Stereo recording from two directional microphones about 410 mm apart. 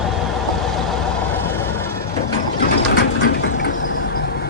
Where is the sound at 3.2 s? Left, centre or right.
Left.